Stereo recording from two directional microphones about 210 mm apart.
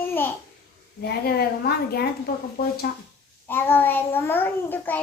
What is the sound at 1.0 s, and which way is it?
A woman's voice, 50° left (ahead or behind).